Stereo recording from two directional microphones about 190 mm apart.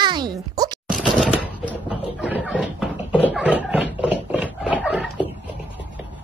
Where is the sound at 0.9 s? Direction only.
Centre (ahead or behind).